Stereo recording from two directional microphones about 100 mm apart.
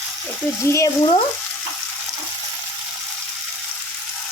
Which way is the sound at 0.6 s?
30° left (ahead or behind).